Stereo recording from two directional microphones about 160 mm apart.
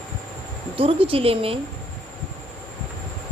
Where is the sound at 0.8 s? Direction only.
35° right (ahead or behind).